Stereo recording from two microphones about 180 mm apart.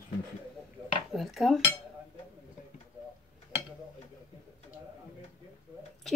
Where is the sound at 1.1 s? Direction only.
Centre (ahead or behind).